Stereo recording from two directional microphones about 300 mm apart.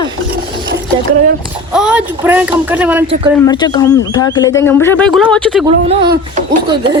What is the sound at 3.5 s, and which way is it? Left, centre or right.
A woman's voice, centre.